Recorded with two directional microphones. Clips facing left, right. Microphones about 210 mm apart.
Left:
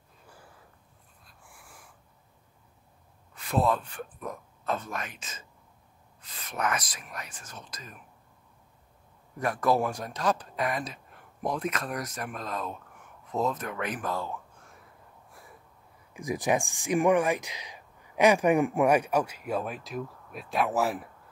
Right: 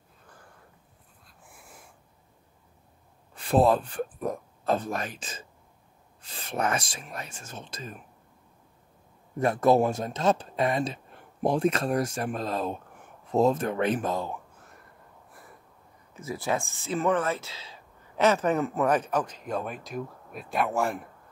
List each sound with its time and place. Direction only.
1.5 s wheeze: 20° right (ahead or behind)
3.3 s speech: 30° right (ahead or behind)
9.4 s speech: 25° right (ahead or behind)
16.1 s speech: 15° left (ahead or behind)